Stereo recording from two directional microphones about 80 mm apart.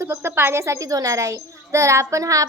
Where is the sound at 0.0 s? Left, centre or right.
Right.